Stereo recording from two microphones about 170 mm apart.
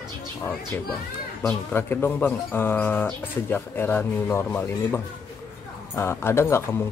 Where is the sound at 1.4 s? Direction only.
15° left (ahead or behind).